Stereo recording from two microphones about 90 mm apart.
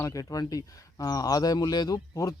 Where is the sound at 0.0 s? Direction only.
40° left (ahead or behind).